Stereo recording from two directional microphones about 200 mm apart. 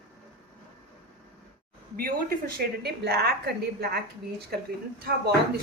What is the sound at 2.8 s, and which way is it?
A woman's voice, 55° right (ahead or behind).